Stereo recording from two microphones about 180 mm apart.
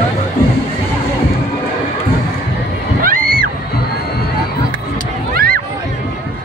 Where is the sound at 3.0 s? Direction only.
50° right (ahead or behind).